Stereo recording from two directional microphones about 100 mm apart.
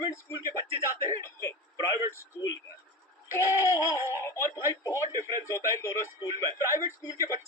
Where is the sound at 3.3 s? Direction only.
30° left (ahead or behind).